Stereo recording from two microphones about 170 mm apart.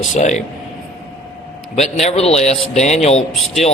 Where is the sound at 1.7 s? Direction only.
40° left (ahead or behind).